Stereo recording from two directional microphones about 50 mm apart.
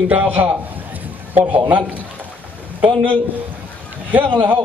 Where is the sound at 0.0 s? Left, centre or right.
Right.